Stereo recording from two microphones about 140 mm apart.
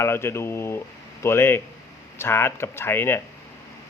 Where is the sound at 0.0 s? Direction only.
20° left (ahead or behind).